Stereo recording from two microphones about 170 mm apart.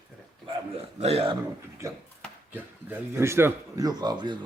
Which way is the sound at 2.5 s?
10° right (ahead or behind).